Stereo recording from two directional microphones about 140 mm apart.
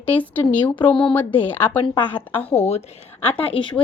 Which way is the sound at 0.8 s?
35° left (ahead or behind).